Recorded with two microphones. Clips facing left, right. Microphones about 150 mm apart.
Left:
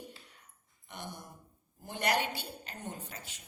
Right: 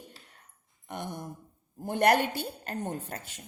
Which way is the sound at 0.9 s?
55° right (ahead or behind).